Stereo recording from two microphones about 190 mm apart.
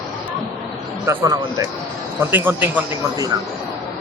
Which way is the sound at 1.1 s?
20° right (ahead or behind).